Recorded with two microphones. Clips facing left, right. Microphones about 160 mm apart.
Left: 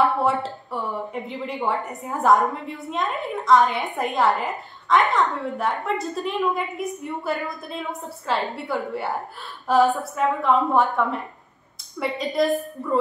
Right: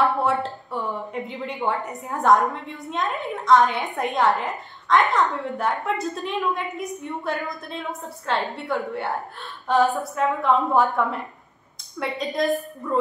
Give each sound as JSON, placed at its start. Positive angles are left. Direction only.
{"t": 0.2, "sound": "a woman's voice", "side_deg": 0}